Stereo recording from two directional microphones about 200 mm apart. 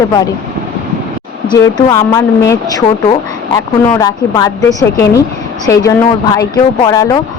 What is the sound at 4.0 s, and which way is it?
A woman's voice, 20° left (ahead or behind).